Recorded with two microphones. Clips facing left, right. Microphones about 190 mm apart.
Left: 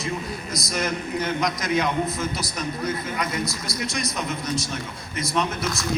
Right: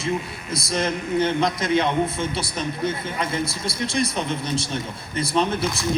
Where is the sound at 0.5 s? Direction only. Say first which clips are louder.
Right 4 dB; 30° right (ahead or behind).